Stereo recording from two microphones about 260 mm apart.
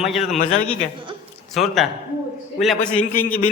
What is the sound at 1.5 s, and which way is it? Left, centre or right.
A man's voice, centre.